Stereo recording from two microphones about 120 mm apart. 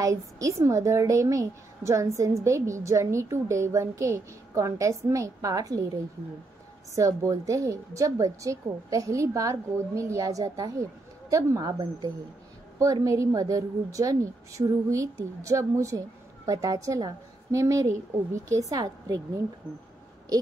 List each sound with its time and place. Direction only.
0.0 s a woman's voice: 25° right (ahead or behind)
7.0 s a woman's voice: 30° right (ahead or behind)